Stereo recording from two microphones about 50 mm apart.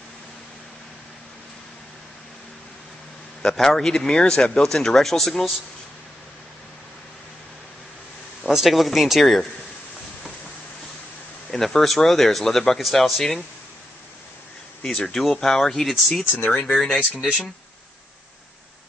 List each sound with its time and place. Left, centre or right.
3.4 s speech: centre
8.5 s speech: centre
11.5 s speech: centre
14.8 s speech: centre
16.4 s speech: left
16.7 s speech: centre